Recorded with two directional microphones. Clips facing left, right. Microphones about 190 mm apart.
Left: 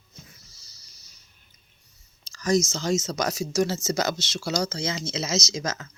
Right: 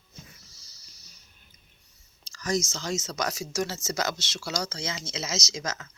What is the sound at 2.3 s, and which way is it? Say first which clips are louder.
Speech: left 6 dB; 35° left (ahead or behind).